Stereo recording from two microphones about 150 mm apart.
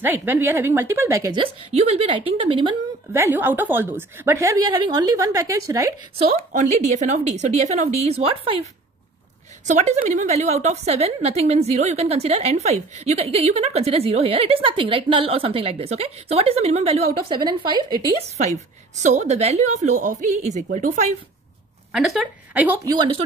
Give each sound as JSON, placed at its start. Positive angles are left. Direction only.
{"t": 0.0, "sound": "a woman's voice", "side_deg": -15}
{"t": 1.7, "sound": "speech", "side_deg": -45}
{"t": 3.1, "sound": "a woman's voice", "side_deg": -15}
{"t": 6.3, "sound": "a woman's voice", "side_deg": -55}
{"t": 9.7, "sound": "a woman's voice", "side_deg": -50}
{"t": 17.3, "sound": "speech", "side_deg": -30}
{"t": 19.0, "sound": "a woman's voice", "side_deg": -50}
{"t": 21.9, "sound": "a woman's voice", "side_deg": 0}
{"t": 22.8, "sound": "speech", "side_deg": -35}